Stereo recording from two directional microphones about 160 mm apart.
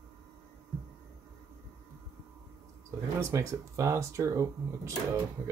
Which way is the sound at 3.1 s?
20° right (ahead or behind).